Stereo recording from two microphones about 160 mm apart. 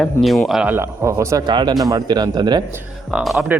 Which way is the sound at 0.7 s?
15° right (ahead or behind).